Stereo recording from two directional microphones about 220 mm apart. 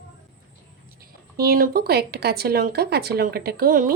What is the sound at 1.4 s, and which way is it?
Speech, 40° right (ahead or behind).